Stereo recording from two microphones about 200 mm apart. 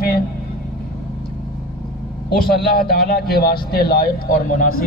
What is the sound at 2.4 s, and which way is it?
A man's voice, 50° left (ahead or behind).